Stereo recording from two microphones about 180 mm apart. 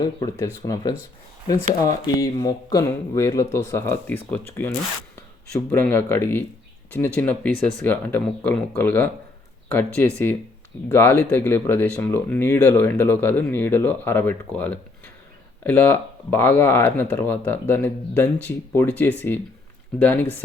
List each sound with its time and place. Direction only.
0.0 s speech: 20° left (ahead or behind)
5.7 s speech: 10° left (ahead or behind)